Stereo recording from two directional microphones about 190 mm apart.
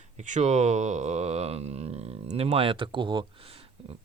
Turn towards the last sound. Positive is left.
turn(degrees=-30)  # may be behind; listen again after turning